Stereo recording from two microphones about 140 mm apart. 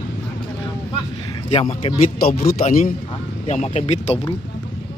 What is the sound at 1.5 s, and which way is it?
Speech, 40° left (ahead or behind).